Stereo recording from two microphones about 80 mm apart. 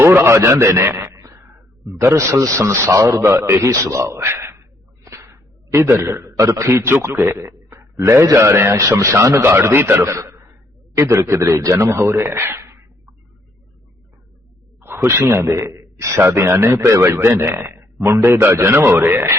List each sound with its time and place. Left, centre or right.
0.0 s radio: right
0.3 s a sound: right
1.9 s a man's voice: right
5.0 s a sound: right
6.3 s a man's voice: right
14.8 s a man's voice: right